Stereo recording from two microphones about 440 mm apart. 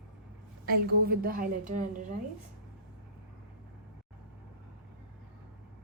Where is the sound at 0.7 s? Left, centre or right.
Centre.